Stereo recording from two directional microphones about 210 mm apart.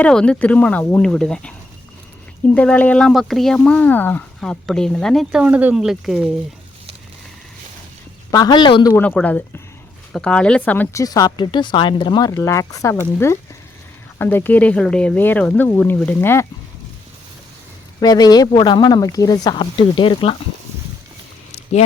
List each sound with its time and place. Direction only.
0.0 s speech: 5° left (ahead or behind)
2.6 s speech: 5° left (ahead or behind)
8.3 s speech: 20° left (ahead or behind)
8.9 s speech: 10° left (ahead or behind)
18.0 s speech: 20° left (ahead or behind)